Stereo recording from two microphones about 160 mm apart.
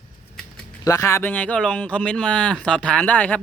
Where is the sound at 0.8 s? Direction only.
20° left (ahead or behind).